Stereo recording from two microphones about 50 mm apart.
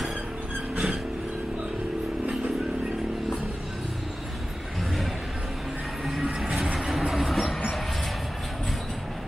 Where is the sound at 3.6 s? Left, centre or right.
Centre.